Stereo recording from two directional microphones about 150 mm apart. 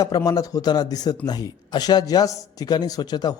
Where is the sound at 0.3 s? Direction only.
25° left (ahead or behind).